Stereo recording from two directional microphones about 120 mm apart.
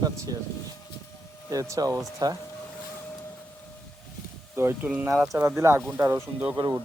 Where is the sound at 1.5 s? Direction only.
25° right (ahead or behind).